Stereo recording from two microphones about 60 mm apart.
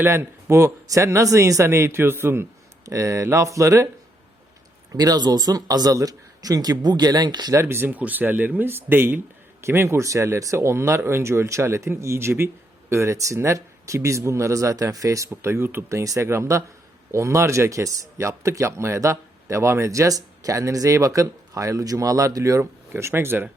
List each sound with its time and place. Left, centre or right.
0.0 s speech: right
0.9 s speech: right
1.6 s speech: right
2.8 s speech: right
4.9 s speech: right
7.6 s speech: right
7.9 s speech: right
9.6 s a man's voice: right
10.0 s speech: right
12.9 s speech: right
15.4 s speech: right
15.9 s speech: right
23.0 s speech: right